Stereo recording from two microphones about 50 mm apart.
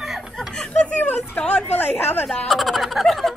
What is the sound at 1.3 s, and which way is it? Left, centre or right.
Speech, centre.